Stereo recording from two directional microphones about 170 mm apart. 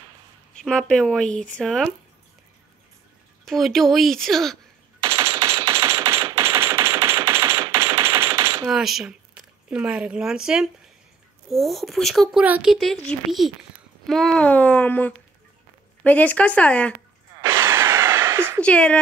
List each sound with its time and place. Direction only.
0.6 s speech: 5° left (ahead or behind)
3.4 s speech: centre (ahead or behind)
5.0 s machine gun: 15° right (ahead or behind)
8.6 s speech: centre (ahead or behind)
17.4 s a sound: 15° right (ahead or behind)
18.6 s speech: 5° left (ahead or behind)